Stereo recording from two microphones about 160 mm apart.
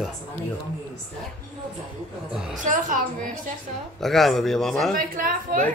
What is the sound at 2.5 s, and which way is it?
Speech, 55° right (ahead or behind).